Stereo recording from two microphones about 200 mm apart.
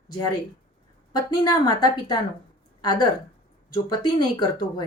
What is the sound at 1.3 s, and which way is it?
A woman's voice, 20° left (ahead or behind).